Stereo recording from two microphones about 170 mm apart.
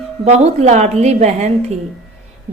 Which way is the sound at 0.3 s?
40° right (ahead or behind).